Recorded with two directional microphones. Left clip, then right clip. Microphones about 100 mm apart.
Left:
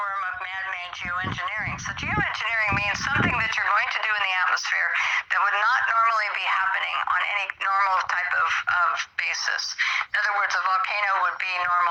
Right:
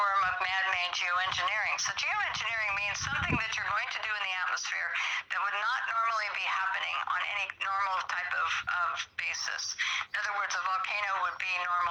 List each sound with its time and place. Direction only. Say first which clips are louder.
2.6 s speech: left 8 dB; 65° left (ahead or behind)
7.7 s speech: left 10 dB; 70° left (ahead or behind)